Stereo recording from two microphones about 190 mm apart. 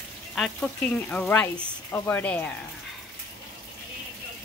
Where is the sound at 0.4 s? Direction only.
5° left (ahead or behind).